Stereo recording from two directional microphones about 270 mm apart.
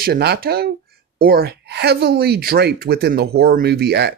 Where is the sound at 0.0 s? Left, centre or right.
Right.